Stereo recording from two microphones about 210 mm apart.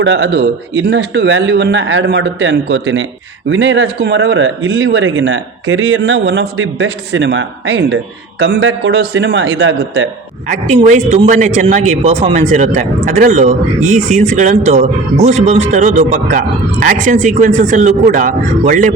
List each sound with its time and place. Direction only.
0.0 s speech: 60° right (ahead or behind)
10.5 s speech: 35° right (ahead or behind)